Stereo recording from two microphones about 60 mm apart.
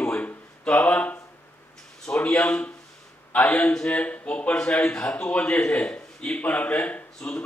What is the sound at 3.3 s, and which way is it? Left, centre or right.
A man's voice, left.